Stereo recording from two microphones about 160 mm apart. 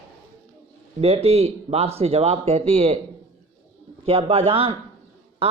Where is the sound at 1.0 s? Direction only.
40° right (ahead or behind).